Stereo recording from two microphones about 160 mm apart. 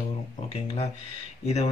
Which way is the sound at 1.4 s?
45° left (ahead or behind).